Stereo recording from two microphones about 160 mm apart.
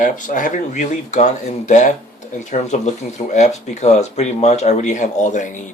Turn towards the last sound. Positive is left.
turn(degrees=50)  # may be behind; listen again after turning